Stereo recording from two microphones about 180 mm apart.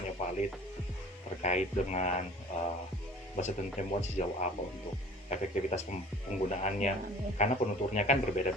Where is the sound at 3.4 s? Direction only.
40° left (ahead or behind).